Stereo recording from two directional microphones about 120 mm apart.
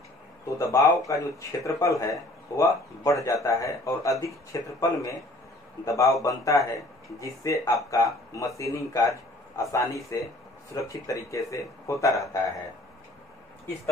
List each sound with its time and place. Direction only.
0.6 s speech: 25° left (ahead or behind)